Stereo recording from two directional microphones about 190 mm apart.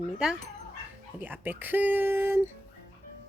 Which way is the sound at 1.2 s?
10° right (ahead or behind).